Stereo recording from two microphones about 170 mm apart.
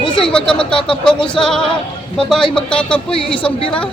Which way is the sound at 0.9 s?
5° left (ahead or behind).